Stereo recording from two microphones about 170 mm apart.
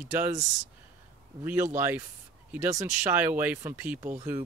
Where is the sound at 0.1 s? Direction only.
10° right (ahead or behind).